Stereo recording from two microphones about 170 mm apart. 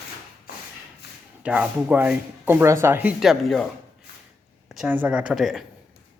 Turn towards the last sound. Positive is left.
turn(degrees=0)  # may be behind; listen again after turning